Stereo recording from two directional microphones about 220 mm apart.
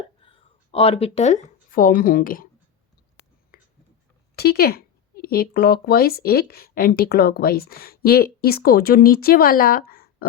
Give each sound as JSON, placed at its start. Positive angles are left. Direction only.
{"t": 0.2, "sound": "speech", "side_deg": 25}
{"t": 3.5, "sound": "whispering", "side_deg": 40}
{"t": 4.4, "sound": "speech", "side_deg": 45}
{"t": 9.9, "sound": "a sound", "side_deg": 40}